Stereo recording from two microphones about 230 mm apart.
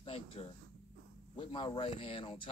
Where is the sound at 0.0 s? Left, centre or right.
Left.